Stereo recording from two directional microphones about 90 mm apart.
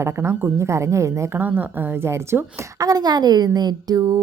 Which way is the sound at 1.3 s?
20° right (ahead or behind).